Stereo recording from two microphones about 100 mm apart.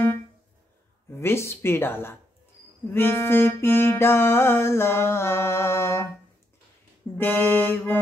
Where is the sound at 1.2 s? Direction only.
25° left (ahead or behind).